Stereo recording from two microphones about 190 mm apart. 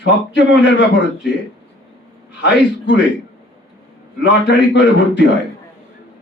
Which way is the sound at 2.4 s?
70° left (ahead or behind).